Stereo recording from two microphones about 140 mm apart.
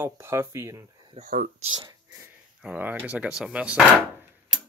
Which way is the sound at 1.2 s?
90° right.